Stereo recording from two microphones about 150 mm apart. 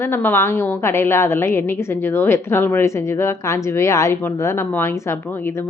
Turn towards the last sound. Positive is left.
turn(degrees=15)  # may be behind; listen again after turning